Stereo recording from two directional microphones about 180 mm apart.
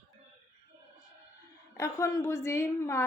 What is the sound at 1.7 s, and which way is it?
A woman's voice, 15° left (ahead or behind).